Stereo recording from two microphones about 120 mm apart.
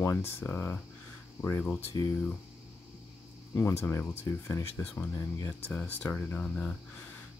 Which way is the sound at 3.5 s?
20° left (ahead or behind).